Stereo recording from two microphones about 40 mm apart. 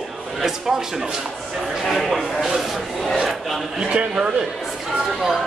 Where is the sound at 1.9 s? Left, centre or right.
Centre.